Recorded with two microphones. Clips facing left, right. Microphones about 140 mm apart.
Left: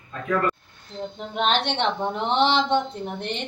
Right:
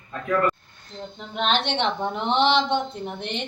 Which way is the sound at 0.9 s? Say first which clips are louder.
Left 4 dB; 10° left (ahead or behind).